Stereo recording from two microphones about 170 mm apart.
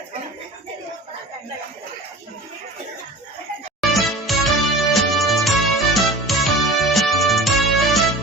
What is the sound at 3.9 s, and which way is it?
Music, centre (ahead or behind).